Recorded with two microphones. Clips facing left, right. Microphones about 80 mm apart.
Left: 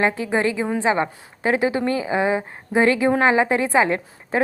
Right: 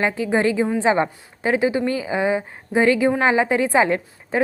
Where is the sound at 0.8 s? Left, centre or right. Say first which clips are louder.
Right 1 dB; centre.